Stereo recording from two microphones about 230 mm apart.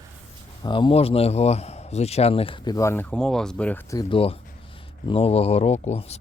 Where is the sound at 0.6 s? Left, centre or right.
Left.